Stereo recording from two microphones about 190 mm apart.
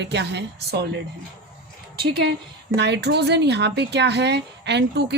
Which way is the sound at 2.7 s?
65° right (ahead or behind).